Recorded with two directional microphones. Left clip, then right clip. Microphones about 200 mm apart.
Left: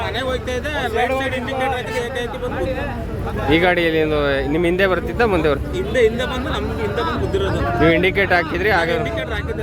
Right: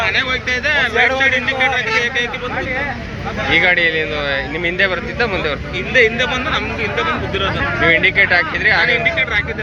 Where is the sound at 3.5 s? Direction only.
65° left (ahead or behind).